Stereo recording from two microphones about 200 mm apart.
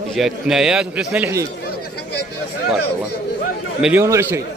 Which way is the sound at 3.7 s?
5° right (ahead or behind).